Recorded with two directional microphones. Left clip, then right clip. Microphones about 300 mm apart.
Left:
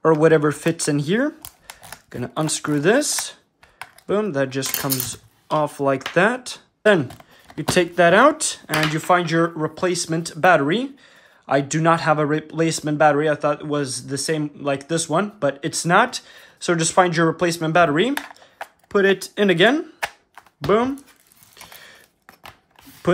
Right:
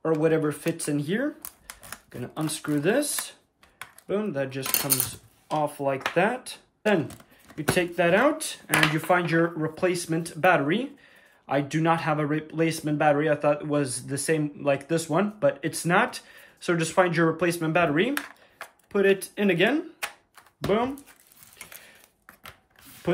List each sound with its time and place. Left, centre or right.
0.0 s speech: left
5.8 s speech: centre
23.1 s speech: left